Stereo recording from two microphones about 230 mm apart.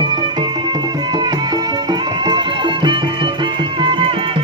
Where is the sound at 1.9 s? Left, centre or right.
Centre.